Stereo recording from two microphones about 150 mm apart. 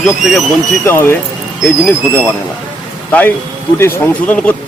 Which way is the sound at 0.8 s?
15° left (ahead or behind).